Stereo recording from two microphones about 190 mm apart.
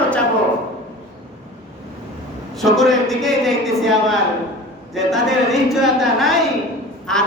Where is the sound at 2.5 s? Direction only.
Centre (ahead or behind).